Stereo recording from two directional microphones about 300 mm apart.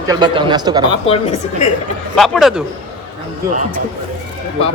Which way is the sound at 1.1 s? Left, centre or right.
Centre.